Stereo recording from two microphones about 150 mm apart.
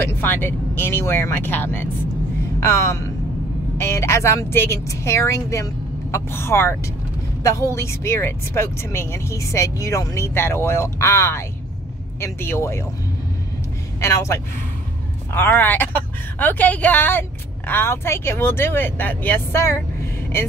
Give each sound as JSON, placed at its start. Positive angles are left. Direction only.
{"t": 0.0, "sound": "a woman's voice", "side_deg": 15}
{"t": 14.0, "sound": "a woman's voice", "side_deg": 20}